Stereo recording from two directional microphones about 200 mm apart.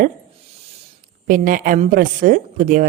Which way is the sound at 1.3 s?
45° right (ahead or behind).